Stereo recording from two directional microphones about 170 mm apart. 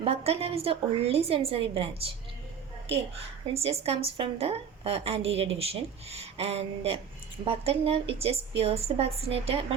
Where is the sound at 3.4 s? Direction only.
35° right (ahead or behind).